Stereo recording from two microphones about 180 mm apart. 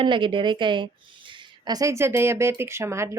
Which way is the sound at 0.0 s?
25° right (ahead or behind).